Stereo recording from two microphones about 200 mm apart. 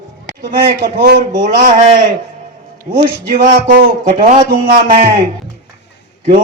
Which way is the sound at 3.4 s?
45° right (ahead or behind).